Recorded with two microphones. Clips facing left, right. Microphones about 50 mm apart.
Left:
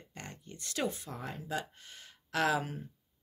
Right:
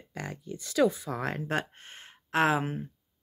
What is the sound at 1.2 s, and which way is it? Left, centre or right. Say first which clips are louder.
Speech: right 7 dB; right.